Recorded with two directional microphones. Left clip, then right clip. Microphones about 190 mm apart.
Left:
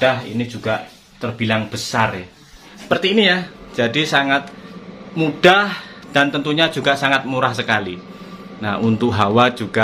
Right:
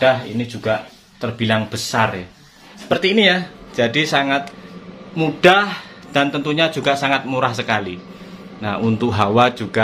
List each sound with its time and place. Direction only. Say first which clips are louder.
0.0 s speech: right 1 dB; 25° right (ahead or behind)
2.9 s a man's voice: even; 10° right (ahead or behind)